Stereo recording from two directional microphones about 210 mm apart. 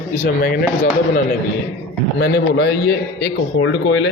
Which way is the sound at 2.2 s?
50° left (ahead or behind).